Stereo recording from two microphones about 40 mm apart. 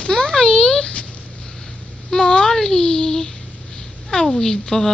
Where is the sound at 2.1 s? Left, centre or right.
Centre.